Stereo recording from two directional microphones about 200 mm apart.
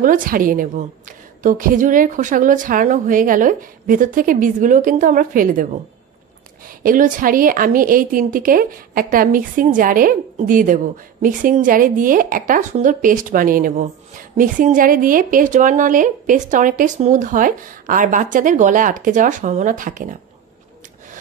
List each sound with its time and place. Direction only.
0.0 s speech: 40° right (ahead or behind)
6.8 s a woman's voice: 45° right (ahead or behind)